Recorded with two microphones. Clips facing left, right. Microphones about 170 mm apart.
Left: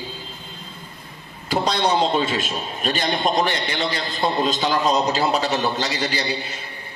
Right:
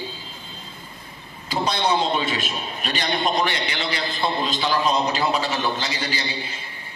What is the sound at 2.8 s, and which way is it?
A man's voice, 45° left (ahead or behind).